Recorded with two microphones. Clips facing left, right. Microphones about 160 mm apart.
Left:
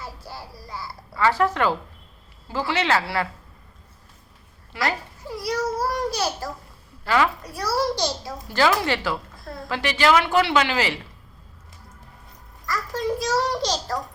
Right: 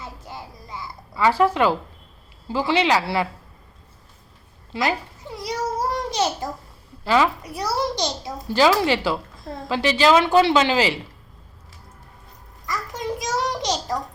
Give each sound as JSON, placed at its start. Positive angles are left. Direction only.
{"t": 0.0, "sound": "babbling", "side_deg": -20}
{"t": 2.5, "sound": "speech", "side_deg": -15}
{"t": 4.7, "sound": "speech", "side_deg": -20}
{"t": 5.2, "sound": "a sound", "side_deg": -20}
{"t": 5.9, "sound": "babbling", "side_deg": -20}
{"t": 7.0, "sound": "a child's voice", "side_deg": -20}
{"t": 12.6, "sound": "a sound", "side_deg": -15}